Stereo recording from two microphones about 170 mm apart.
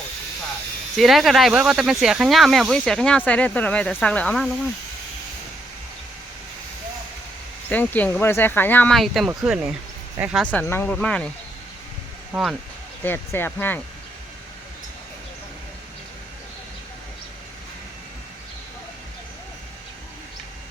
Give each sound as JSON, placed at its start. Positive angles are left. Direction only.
{"t": 0.9, "sound": "speech", "side_deg": 0}
{"t": 7.7, "sound": "speech", "side_deg": 10}
{"t": 10.5, "sound": "speech", "side_deg": 10}
{"t": 12.3, "sound": "speech", "side_deg": 0}
{"t": 13.1, "sound": "speech", "side_deg": 10}